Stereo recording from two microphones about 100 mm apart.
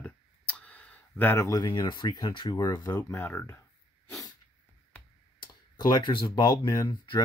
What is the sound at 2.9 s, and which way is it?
Speech, 30° left (ahead or behind).